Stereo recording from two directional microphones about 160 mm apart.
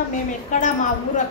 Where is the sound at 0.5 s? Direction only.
50° left (ahead or behind).